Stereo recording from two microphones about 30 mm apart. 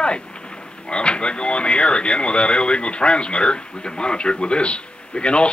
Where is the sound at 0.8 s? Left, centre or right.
Left.